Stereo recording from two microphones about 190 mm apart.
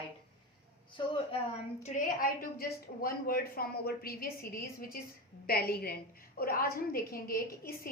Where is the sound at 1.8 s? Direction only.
40° left (ahead or behind).